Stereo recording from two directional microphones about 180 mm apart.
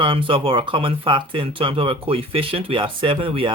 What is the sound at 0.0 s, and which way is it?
Speech, 30° right (ahead or behind).